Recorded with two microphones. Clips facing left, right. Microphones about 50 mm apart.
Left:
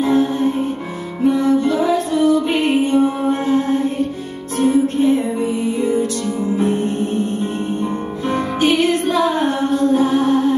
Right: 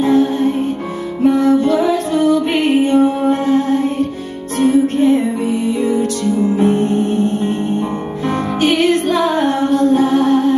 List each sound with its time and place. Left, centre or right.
0.0 s music: right
6.5 s music: right
8.3 s music: right